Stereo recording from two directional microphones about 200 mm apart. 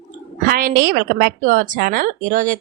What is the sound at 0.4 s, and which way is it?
A woman's voice, 45° right (ahead or behind).